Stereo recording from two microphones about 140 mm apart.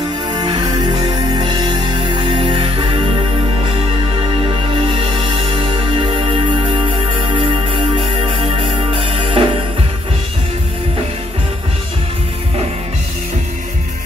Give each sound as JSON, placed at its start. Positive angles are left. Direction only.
{"t": 0.3, "sound": "music", "side_deg": -30}
{"t": 4.7, "sound": "music", "side_deg": -40}